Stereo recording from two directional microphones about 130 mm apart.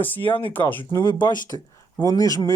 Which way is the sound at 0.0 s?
15° left (ahead or behind).